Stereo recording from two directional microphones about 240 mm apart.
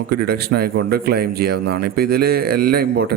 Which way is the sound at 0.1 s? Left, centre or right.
Right.